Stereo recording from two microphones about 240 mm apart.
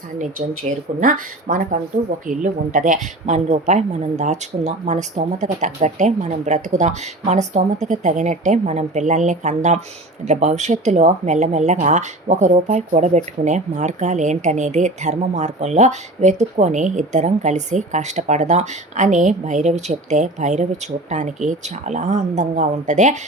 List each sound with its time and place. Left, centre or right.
0.9 s speech: right